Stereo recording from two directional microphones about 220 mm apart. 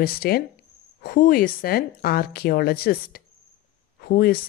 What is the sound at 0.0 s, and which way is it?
Speech, 45° left (ahead or behind).